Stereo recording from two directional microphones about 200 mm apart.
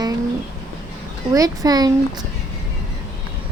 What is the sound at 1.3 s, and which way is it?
Speech, 15° right (ahead or behind).